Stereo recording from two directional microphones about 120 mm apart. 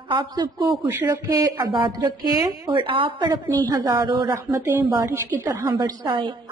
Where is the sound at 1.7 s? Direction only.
45° right (ahead or behind).